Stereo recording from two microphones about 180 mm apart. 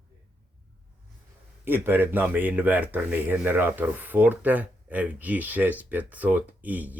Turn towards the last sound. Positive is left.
turn(degrees=-10)  # may be behind; listen again after turning